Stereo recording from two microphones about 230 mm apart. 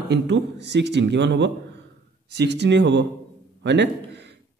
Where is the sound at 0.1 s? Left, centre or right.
Right.